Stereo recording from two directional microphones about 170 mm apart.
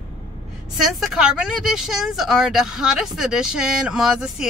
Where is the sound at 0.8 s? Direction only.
Centre (ahead or behind).